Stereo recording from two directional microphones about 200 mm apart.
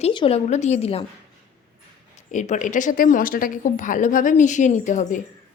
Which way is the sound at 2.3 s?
40° left (ahead or behind).